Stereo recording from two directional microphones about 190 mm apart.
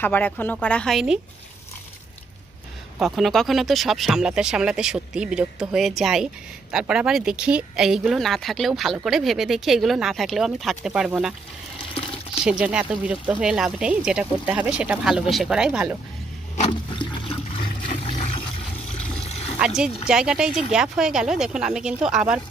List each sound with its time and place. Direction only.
0.0 s speech: 10° left (ahead or behind)
3.0 s speech: centre (ahead or behind)
12.4 s speech: 5° right (ahead or behind)
16.5 s water: 35° left (ahead or behind)
17.0 s toilet flush: 30° left (ahead or behind)
18.0 s a sound: 30° left (ahead or behind)
19.1 s water: 35° left (ahead or behind)
20.1 s speech: 5° right (ahead or behind)